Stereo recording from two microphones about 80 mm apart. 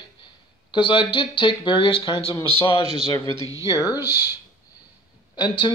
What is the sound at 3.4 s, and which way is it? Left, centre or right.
Speech, right.